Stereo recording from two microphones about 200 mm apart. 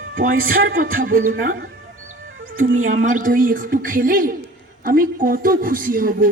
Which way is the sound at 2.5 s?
40° right (ahead or behind).